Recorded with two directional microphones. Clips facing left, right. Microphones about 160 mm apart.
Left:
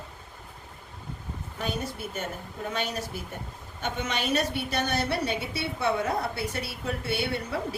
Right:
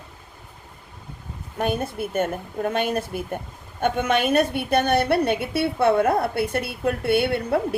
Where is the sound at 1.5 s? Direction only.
55° right (ahead or behind).